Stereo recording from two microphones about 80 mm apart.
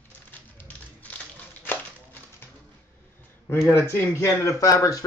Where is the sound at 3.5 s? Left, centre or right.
Left.